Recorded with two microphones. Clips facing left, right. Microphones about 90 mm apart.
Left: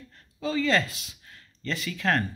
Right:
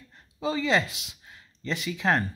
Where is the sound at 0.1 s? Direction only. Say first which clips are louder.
Even; 20° right (ahead or behind).